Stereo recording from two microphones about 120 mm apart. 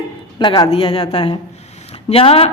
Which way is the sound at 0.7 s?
50° left (ahead or behind).